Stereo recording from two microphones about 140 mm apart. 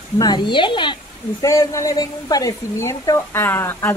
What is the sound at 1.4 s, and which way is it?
A woman's voice, 20° left (ahead or behind).